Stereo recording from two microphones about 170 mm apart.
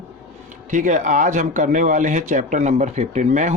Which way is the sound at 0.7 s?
50° right (ahead or behind).